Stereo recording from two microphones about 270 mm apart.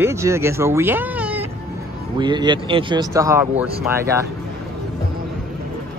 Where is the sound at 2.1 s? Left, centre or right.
Centre.